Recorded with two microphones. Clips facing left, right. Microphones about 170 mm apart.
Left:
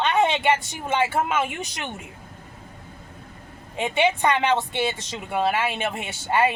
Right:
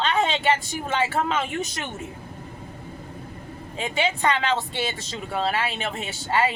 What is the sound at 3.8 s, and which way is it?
Speech, 25° left (ahead or behind).